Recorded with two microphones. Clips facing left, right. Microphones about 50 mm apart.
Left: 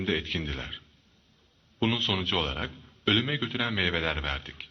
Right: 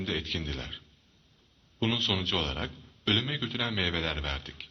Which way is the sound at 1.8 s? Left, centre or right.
Centre.